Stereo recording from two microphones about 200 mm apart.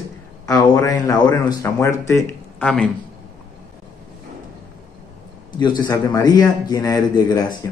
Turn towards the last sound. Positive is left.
turn(degrees=15)  # may be behind; listen again after turning